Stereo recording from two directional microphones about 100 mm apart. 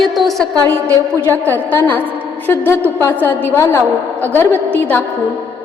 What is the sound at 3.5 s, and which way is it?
A woman's voice, 30° left (ahead or behind).